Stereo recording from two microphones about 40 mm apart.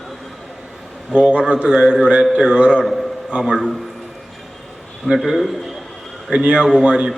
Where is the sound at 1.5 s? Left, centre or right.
Right.